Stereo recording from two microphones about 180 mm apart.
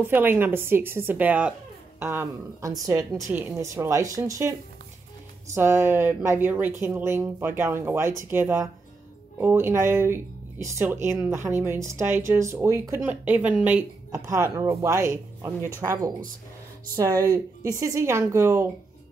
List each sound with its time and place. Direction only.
0.0 s speech: 10° right (ahead or behind)